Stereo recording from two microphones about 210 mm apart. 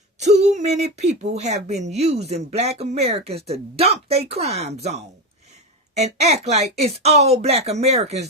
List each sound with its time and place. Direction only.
0.2 s speech: 35° right (ahead or behind)